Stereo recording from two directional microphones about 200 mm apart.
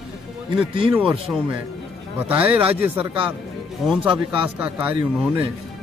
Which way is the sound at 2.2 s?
10° right (ahead or behind).